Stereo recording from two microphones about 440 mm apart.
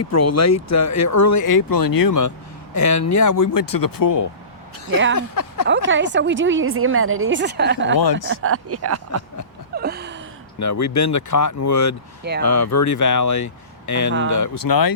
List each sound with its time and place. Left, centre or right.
0.0 s speech: left
5.6 s a woman's voice: right
7.9 s speech: left
8.3 s a woman's voice: right
9.7 s gasp: right
10.6 s speech: left